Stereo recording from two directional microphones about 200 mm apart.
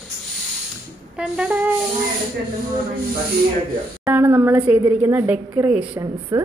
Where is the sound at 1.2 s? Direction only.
5° right (ahead or behind).